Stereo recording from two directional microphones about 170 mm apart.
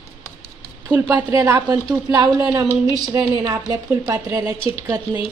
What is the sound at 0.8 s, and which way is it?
A woman's voice, 10° right (ahead or behind).